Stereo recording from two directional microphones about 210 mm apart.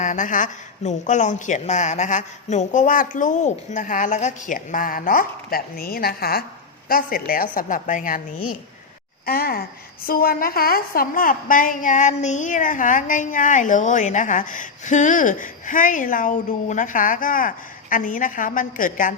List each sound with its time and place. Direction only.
0.0 s a woman's voice: 35° left (ahead or behind)
9.2 s a woman's voice: 45° left (ahead or behind)